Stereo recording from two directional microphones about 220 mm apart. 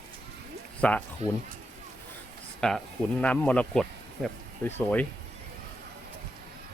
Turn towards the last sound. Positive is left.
turn(degrees=10)  # may be behind; listen again after turning